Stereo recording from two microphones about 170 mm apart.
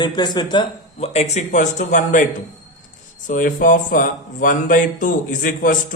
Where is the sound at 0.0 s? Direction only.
25° left (ahead or behind); by 2.2 s 50° left (ahead or behind).